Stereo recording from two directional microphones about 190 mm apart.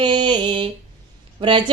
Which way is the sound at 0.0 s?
25° right (ahead or behind).